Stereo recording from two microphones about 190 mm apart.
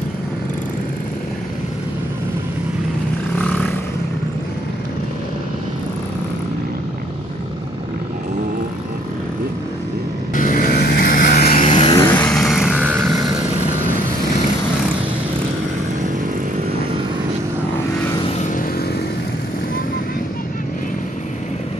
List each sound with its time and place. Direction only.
10.3 s vehicle: 45° left (ahead or behind)
11.6 s vehicle: 30° left (ahead or behind)
11.9 s vehicle: 5° left (ahead or behind); by 13.2 s 10° right (ahead or behind)